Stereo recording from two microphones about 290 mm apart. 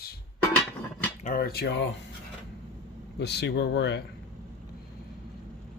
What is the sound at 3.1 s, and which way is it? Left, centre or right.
Speech, left.